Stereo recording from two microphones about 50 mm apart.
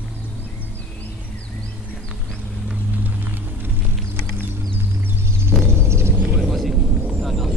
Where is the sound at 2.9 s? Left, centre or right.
Right.